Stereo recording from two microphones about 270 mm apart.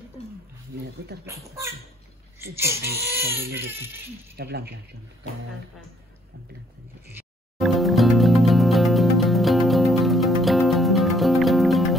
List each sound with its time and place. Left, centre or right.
1.2 s a child's voice: centre
3.2 s speech: right
7.2 s music: centre